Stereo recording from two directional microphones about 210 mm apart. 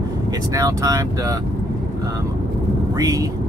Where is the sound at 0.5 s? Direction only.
15° right (ahead or behind).